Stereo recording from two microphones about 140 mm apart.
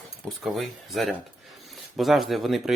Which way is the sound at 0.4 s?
Centre (ahead or behind).